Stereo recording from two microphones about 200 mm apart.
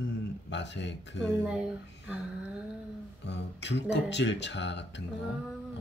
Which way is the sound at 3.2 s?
60° left (ahead or behind).